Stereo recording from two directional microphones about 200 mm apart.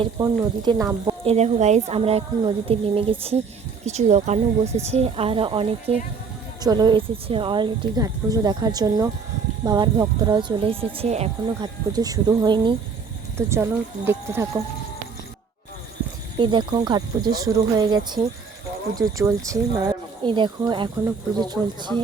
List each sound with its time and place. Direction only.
0.0 s a woman's voice: 25° right (ahead or behind)
1.2 s a woman's voice: 30° right (ahead or behind)
11.6 s a woman's voice: 20° right (ahead or behind)
16.4 s a woman's voice: 25° right (ahead or behind)